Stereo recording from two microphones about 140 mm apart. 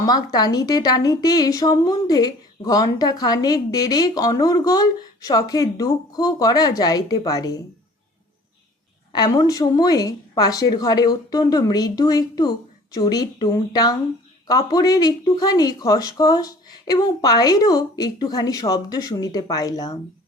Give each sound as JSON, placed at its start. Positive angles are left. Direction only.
{"t": 0.0, "sound": "a woman's voice", "side_deg": 30}
{"t": 9.1, "sound": "a woman's voice", "side_deg": 30}